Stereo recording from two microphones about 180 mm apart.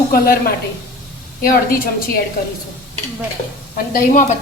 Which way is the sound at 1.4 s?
55° left (ahead or behind).